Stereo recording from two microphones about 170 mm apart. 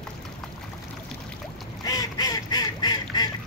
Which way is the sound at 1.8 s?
20° left (ahead or behind).